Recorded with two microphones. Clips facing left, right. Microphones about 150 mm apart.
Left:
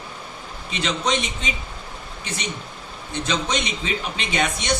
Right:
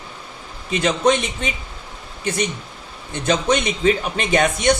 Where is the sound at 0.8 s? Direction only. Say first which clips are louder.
Right 6 dB; 50° right (ahead or behind).